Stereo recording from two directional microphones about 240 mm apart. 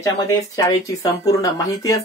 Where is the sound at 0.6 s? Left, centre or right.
Centre.